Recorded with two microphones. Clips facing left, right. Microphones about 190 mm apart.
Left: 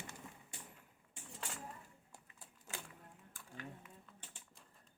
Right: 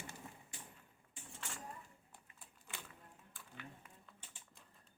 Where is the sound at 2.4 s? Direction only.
45° left (ahead or behind).